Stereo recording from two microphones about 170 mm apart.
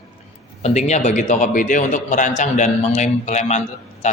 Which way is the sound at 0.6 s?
40° left (ahead or behind).